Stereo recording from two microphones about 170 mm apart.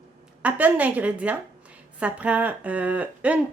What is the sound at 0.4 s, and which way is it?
Speech, 10° right (ahead or behind).